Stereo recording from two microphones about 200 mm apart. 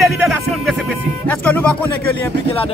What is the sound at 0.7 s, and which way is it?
Speech, 5° left (ahead or behind).